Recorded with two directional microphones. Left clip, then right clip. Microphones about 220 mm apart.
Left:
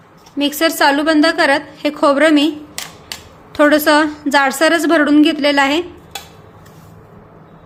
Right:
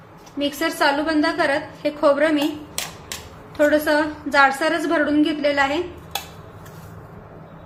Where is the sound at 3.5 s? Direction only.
55° left (ahead or behind).